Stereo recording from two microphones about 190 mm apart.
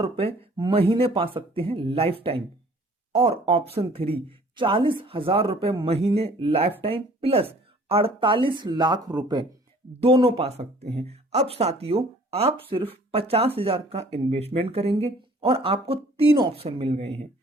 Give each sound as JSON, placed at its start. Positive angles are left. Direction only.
{"t": 0.0, "sound": "speech", "side_deg": -30}